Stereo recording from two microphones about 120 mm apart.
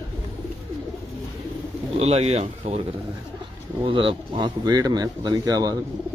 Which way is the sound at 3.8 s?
45° right (ahead or behind).